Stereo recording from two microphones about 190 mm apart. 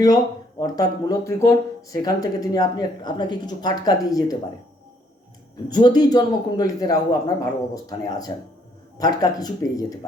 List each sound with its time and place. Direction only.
0.6 s speech: 20° left (ahead or behind)
5.7 s speech: 20° left (ahead or behind)